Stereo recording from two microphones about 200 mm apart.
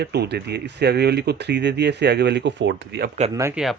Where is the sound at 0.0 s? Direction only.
55° right (ahead or behind).